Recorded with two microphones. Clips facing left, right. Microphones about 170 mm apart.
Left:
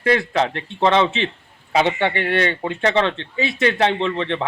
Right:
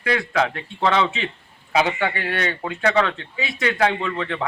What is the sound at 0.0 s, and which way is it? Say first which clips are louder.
Speech: left 3 dB; 25° left (ahead or behind).